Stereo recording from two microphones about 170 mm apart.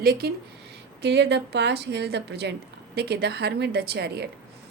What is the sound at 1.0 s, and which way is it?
A woman's voice, 90° right.